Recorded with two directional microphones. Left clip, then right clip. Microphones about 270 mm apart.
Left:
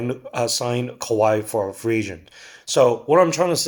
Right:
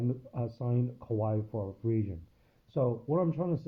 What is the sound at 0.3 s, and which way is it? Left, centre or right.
Speech, centre.